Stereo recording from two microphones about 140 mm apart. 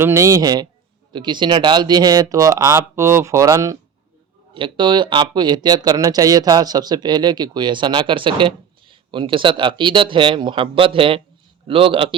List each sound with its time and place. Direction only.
0.0 s speech: 20° right (ahead or behind)
4.5 s speech: 35° right (ahead or behind)